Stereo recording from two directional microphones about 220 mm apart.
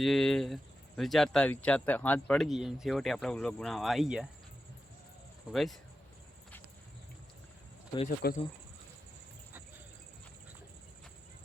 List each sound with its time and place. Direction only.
0.0 s speech: centre (ahead or behind)
5.5 s speech: centre (ahead or behind)
8.2 s speech: 45° left (ahead or behind)